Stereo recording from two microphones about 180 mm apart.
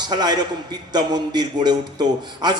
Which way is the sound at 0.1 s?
20° right (ahead or behind).